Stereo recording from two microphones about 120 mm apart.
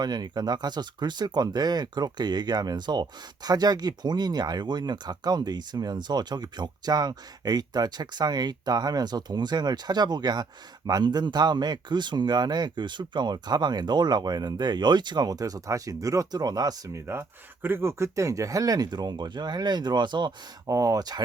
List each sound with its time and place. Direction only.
0.0 s speech: 35° right (ahead or behind)
20.7 s speech: 30° right (ahead or behind)